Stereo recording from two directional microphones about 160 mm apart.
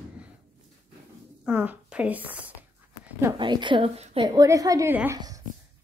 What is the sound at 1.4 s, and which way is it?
A woman's voice, 10° right (ahead or behind).